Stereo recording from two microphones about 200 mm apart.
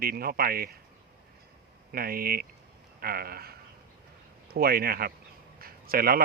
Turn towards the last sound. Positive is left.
turn(degrees=-45)  # may be behind; listen again after turning